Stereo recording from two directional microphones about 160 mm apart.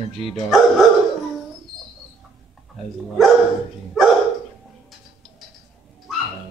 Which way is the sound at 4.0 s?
Centre (ahead or behind).